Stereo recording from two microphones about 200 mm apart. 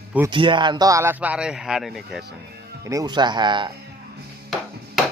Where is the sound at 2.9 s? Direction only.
20° right (ahead or behind).